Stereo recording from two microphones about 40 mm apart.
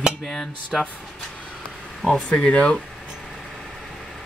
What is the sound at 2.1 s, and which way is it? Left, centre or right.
Speech, left.